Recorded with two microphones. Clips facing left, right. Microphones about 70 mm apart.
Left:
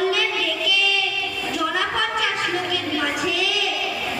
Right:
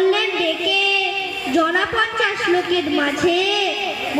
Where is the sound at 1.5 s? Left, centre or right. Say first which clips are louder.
Right 6 dB; right.